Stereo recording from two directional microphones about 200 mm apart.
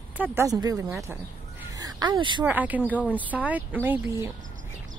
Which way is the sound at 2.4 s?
10° right (ahead or behind).